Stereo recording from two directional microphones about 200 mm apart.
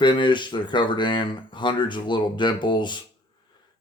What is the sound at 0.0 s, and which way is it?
Speech, 25° left (ahead or behind).